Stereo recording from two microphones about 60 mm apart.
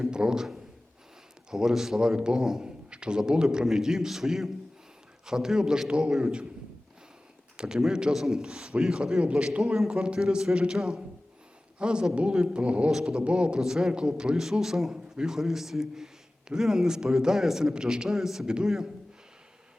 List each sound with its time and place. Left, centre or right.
0.0 s a man's voice: centre
7.5 s a man's voice: centre